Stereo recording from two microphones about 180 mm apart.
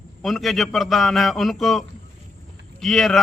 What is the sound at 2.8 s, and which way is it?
Speech, centre (ahead or behind).